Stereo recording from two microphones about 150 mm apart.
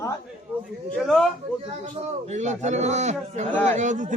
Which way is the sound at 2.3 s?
50° right (ahead or behind).